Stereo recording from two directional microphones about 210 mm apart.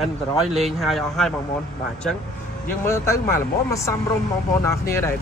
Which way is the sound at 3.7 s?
15° left (ahead or behind).